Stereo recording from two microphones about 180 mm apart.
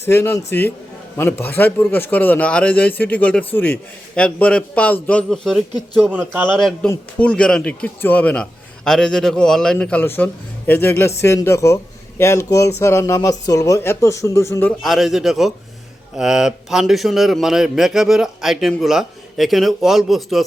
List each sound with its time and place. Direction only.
0.0 s a man's voice: 15° left (ahead or behind); by 6.5 s 10° right (ahead or behind)
6.5 s a man's voice: 5° left (ahead or behind)
14.8 s a man's voice: centre (ahead or behind)